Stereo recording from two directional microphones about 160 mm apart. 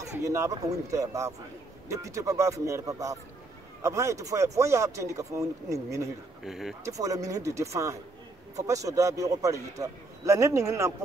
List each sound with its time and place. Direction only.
0.0 s a man's voice: 20° right (ahead or behind)
6.4 s speech: centre (ahead or behind)
6.8 s a man's voice: 20° right (ahead or behind)